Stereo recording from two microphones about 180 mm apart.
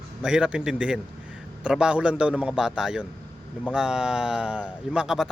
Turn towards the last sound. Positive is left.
turn(degrees=-5)  # may be behind; listen again after turning